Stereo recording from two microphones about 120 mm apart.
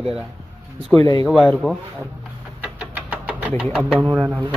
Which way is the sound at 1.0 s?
30° left (ahead or behind).